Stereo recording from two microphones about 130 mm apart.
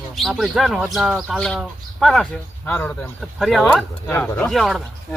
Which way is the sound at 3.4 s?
Centre (ahead or behind).